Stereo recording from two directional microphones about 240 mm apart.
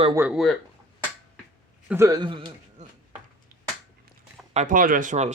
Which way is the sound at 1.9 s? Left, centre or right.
Centre.